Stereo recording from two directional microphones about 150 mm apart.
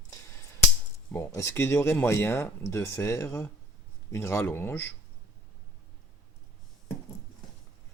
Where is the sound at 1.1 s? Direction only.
15° left (ahead or behind).